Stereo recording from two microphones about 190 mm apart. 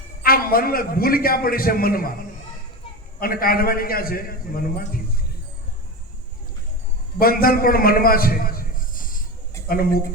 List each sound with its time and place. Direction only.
0.2 s a man's voice: 50° left (ahead or behind)
3.2 s a man's voice: 50° left (ahead or behind)
7.2 s a man's voice: 50° left (ahead or behind)